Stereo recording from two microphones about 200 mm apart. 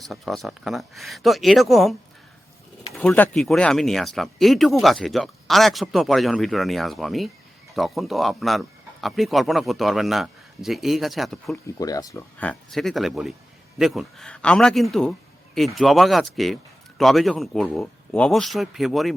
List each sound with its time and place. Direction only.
0.0 s speech: centre (ahead or behind)
11.5 s speech: 20° left (ahead or behind)
12.4 s speech: 5° left (ahead or behind)